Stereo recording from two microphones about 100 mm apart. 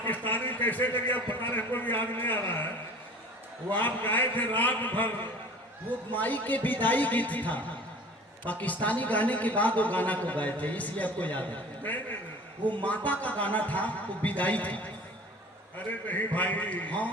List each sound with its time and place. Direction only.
0.1 s a man's voice: 20° left (ahead or behind)
3.7 s speech: 20° left (ahead or behind)
15.9 s speech: 15° left (ahead or behind)